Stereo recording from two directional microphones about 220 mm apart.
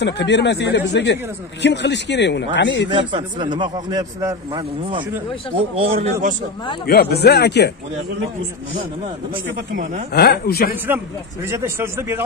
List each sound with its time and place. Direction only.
0.0 s speech: 50° left (ahead or behind)
2.9 s a man's voice: 20° right (ahead or behind)
5.9 s a man's voice: 35° right (ahead or behind)
6.9 s speech: 45° left (ahead or behind)
10.1 s speech: 45° left (ahead or behind)
11.5 s speech: 10° right (ahead or behind)